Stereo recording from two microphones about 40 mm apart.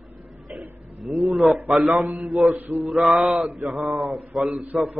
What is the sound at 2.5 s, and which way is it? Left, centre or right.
Mantra, right.